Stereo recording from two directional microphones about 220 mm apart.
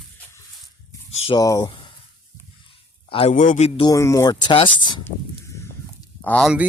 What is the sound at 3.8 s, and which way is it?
Speech, 15° left (ahead or behind).